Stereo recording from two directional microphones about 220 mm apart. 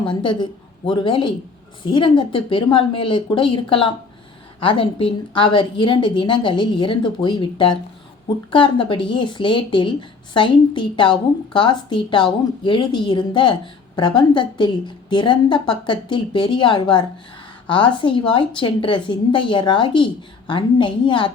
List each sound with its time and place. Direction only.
0.0 s a woman's voice: 20° left (ahead or behind)